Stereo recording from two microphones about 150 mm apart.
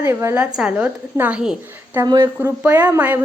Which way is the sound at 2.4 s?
15° right (ahead or behind).